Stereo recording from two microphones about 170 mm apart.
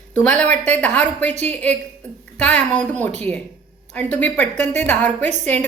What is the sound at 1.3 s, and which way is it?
Speech, 40° right (ahead or behind).